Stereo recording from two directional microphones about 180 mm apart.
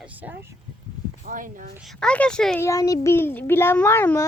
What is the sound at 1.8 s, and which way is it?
Speech, centre (ahead or behind).